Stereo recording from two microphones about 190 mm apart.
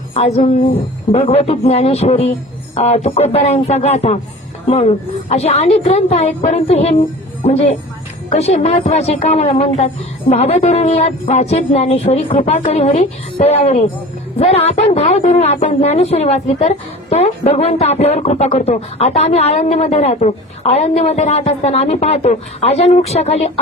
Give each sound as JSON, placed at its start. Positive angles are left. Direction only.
{"t": 0.1, "sound": "a woman's voice", "side_deg": 35}